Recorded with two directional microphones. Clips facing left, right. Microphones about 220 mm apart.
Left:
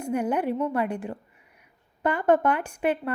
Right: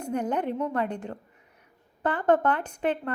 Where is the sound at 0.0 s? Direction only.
10° left (ahead or behind).